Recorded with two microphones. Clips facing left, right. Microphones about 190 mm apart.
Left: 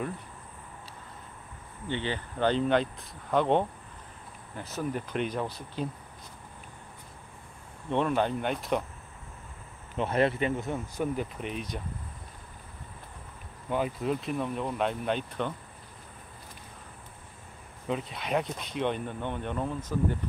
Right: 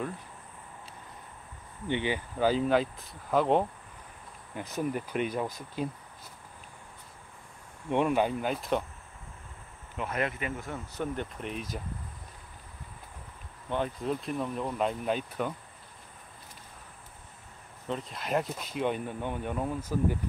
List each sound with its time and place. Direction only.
1.9 s speech: 15° right (ahead or behind)
4.6 s speech: 15° right (ahead or behind)
7.9 s speech: 10° right (ahead or behind)
9.9 s speech: 30° left (ahead or behind)
11.0 s speech: 5° left (ahead or behind)
13.7 s speech: 5° left (ahead or behind)
17.8 s speech: 5° left (ahead or behind)